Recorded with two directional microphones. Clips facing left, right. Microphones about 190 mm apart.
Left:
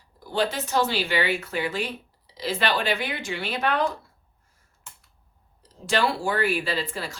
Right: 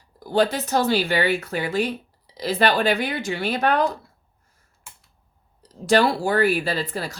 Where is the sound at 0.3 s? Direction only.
40° right (ahead or behind).